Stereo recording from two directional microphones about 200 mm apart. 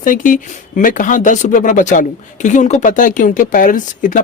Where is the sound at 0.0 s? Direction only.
40° left (ahead or behind).